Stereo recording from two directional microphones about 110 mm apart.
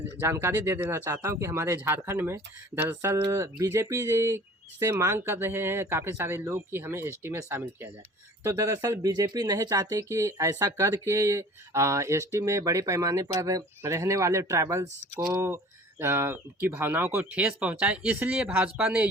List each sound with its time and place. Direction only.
0.2 s speech: 20° right (ahead or behind)